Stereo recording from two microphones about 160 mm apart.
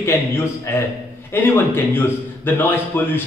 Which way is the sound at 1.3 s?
15° left (ahead or behind).